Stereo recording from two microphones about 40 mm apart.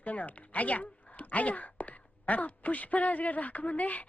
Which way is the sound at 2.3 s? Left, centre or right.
Left.